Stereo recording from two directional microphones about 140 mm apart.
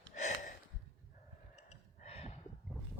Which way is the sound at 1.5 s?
50° left (ahead or behind).